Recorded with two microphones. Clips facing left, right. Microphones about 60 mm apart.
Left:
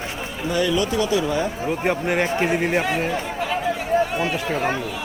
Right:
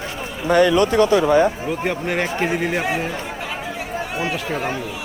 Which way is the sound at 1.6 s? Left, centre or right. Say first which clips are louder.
Left 1 dB; centre.